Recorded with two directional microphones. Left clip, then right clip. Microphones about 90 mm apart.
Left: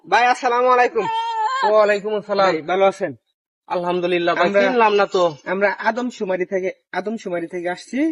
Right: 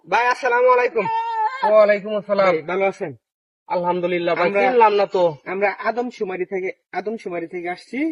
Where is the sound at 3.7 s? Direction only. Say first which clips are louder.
Even; 25° left (ahead or behind).